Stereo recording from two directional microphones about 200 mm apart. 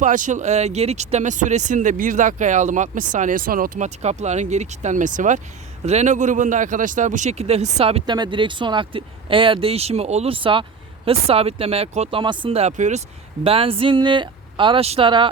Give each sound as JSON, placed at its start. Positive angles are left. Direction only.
{"t": 0.0, "sound": "a man's voice", "side_deg": -40}